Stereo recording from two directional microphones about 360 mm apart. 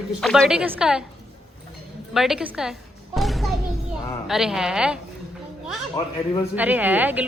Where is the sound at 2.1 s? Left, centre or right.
Centre.